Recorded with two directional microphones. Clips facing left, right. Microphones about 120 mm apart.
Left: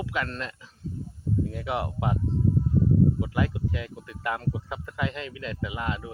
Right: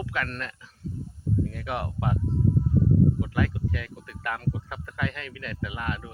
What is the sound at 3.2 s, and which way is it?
Speech, 20° left (ahead or behind).